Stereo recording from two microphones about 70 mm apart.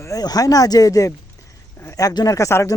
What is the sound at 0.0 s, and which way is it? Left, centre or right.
Speech, left.